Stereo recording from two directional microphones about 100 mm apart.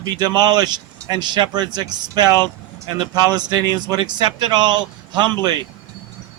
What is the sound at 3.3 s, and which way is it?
Speech, 45° right (ahead or behind).